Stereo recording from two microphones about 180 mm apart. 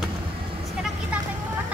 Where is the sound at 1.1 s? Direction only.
5° right (ahead or behind).